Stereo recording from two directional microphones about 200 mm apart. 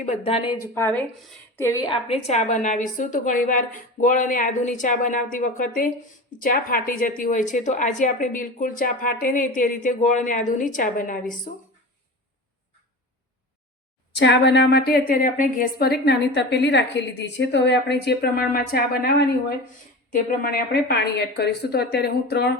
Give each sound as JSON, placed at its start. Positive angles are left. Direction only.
{"t": 0.0, "sound": "speech", "side_deg": 30}
{"t": 0.7, "sound": "a woman's voice", "side_deg": 10}
{"t": 14.1, "sound": "a woman's voice", "side_deg": 60}